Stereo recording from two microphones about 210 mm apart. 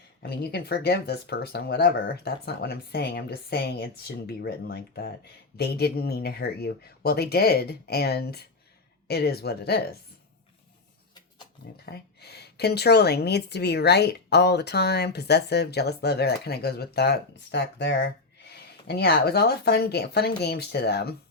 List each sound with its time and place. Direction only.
0.2 s a woman's voice: 50° left (ahead or behind)
11.9 s a woman's voice: 50° left (ahead or behind)